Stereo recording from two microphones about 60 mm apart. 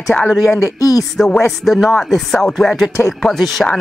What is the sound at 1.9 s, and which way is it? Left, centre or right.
Speech, centre.